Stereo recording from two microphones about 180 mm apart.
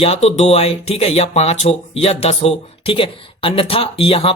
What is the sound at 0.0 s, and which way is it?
Speech, 35° left (ahead or behind).